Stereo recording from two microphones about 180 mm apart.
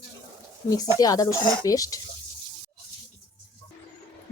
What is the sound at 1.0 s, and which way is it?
Speech, 20° left (ahead or behind).